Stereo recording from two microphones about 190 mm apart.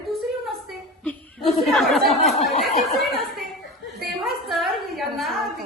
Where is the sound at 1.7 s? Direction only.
Centre (ahead or behind).